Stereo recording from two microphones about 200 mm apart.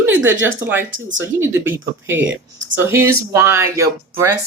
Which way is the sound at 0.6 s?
10° right (ahead or behind).